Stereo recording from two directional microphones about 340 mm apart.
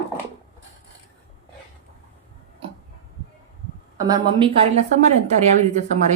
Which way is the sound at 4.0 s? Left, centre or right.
Centre.